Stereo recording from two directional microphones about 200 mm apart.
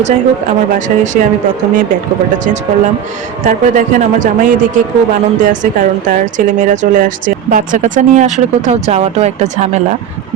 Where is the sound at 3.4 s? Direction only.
40° right (ahead or behind).